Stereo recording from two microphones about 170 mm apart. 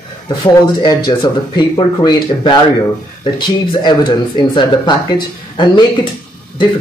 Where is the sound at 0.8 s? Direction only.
25° left (ahead or behind).